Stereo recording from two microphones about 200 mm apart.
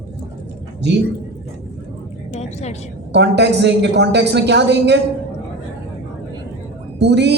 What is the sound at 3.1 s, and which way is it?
Music, 60° right (ahead or behind).